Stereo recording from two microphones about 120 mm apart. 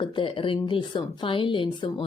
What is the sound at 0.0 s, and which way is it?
Speech, 45° left (ahead or behind).